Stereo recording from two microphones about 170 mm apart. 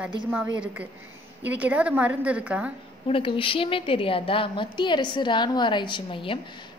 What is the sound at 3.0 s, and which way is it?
A woman's voice, 30° left (ahead or behind).